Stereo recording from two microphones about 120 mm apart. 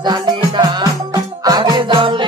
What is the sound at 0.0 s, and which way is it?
Music, 35° right (ahead or behind).